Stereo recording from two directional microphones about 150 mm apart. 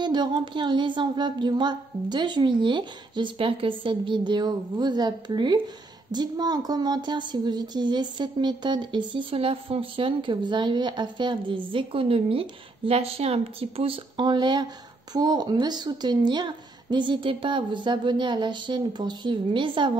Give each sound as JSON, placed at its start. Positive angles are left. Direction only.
{"t": 0.0, "sound": "a woman's voice", "side_deg": -30}